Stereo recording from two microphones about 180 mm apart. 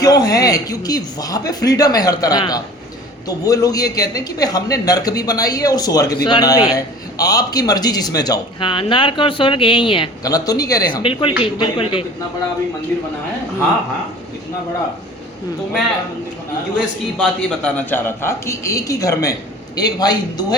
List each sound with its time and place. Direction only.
0.0 s a man's voice: 20° left (ahead or behind)
17.2 s a man's voice: 5° left (ahead or behind)